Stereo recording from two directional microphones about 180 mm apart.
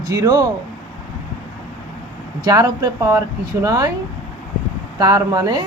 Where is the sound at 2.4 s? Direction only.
20° right (ahead or behind).